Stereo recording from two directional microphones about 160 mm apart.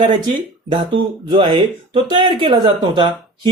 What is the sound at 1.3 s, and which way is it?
Speech, 30° right (ahead or behind).